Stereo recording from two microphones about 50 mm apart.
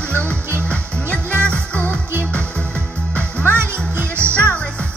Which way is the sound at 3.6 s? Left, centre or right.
Right.